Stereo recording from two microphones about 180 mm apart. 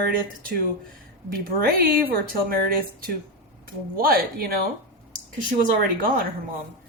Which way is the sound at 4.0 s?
55° right (ahead or behind).